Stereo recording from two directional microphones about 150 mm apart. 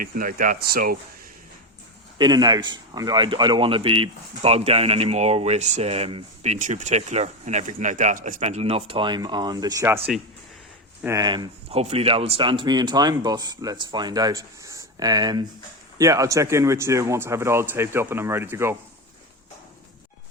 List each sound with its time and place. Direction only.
0.0 s speech: 70° right (ahead or behind); by 0.9 s 85° right
2.1 s speech: 30° right (ahead or behind)
10.1 s speech: centre (ahead or behind)
11.0 s speech: 20° right (ahead or behind)
11.7 s speech: 40° right (ahead or behind); by 18.8 s 15° right (ahead or behind)